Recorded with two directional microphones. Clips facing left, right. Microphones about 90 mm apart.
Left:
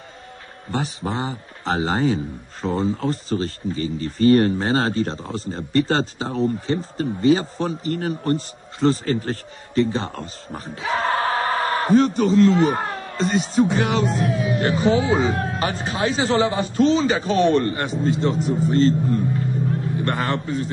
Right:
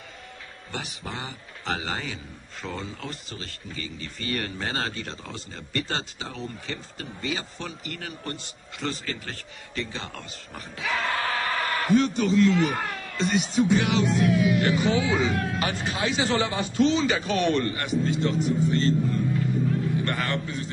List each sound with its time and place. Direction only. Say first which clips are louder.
0.7 s a man's voice: left 10 dB; 35° left (ahead or behind)